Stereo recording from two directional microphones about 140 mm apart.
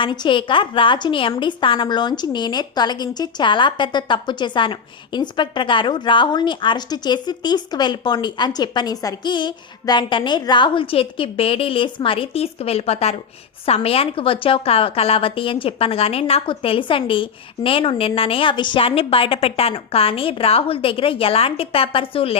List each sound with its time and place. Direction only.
0.0 s a woman's voice: 35° left (ahead or behind)